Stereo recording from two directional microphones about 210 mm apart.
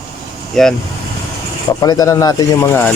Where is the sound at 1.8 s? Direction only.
15° left (ahead or behind).